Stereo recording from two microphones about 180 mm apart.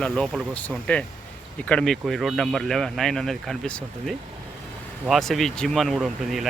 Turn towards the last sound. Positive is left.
turn(degrees=0)  # may be behind; listen again after turning